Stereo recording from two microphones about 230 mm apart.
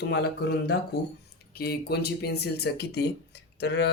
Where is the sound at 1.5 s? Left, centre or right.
Left.